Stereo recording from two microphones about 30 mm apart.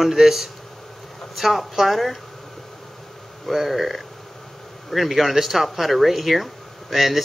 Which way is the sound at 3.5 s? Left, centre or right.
Centre.